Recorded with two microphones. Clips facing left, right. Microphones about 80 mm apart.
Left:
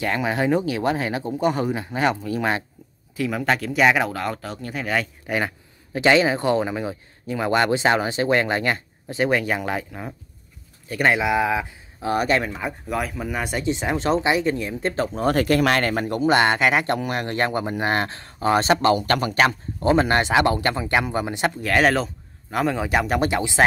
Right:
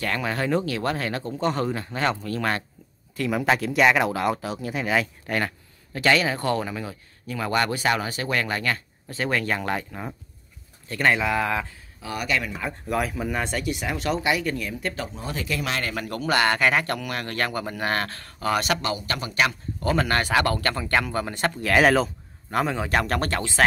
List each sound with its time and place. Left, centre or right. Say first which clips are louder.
0.0 s speech: left 4 dB; centre
3.2 s speech: even; centre
5.9 s speech: left 4 dB; left
12.0 s speech: left 6 dB; left
12.8 s speech: right 2 dB; centre
13.6 s speech: left 4 dB; left
15.1 s speech: left 11 dB; left
16.1 s speech: left 3 dB; left
18.9 s speech: left 6 dB; left
19.8 s speech: left 5 dB; left
21.5 s speech: right 1 dB; centre